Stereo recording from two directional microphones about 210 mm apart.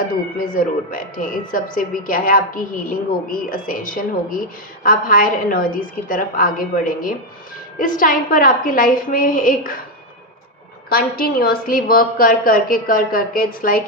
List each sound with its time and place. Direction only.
0.3 s a woman's voice: 40° left (ahead or behind)
10.8 s a woman's voice: 45° left (ahead or behind)